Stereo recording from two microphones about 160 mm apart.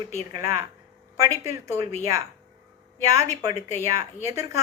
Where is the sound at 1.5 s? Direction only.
15° right (ahead or behind).